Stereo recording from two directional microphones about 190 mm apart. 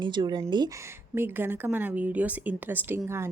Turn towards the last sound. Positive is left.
turn(degrees=-15)  # may be behind; listen again after turning